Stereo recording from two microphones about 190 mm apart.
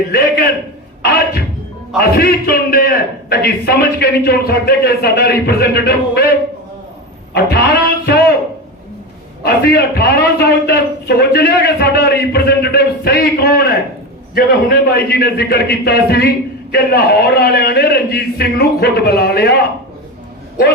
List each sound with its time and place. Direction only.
0.1 s a man's voice: 55° left (ahead or behind)
2.0 s a man's voice: 55° left (ahead or behind)
7.3 s speech: 55° left (ahead or behind)
9.4 s a man's voice: 55° left (ahead or behind)